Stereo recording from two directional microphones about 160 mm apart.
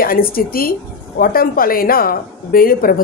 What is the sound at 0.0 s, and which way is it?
A woman's voice, 65° left (ahead or behind).